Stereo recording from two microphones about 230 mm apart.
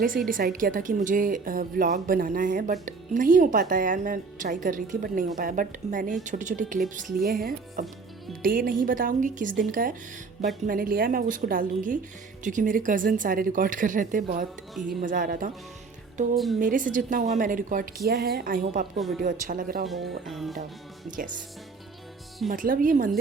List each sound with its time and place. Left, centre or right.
0.3 s speech: right
16.6 s speech: right
18.9 s speech: centre
19.2 s speech: right
19.9 s speech: centre
22.4 s speech: right